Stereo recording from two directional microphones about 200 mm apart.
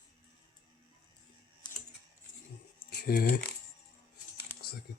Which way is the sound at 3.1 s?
50° left (ahead or behind).